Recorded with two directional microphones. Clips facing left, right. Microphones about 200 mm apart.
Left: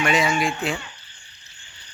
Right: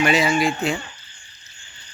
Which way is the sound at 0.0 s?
5° right (ahead or behind).